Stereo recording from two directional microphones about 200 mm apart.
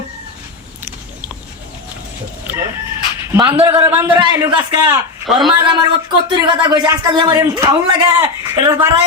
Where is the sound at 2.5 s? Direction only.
10° right (ahead or behind).